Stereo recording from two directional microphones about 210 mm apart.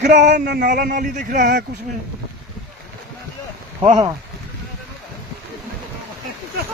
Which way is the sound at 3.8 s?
20° right (ahead or behind).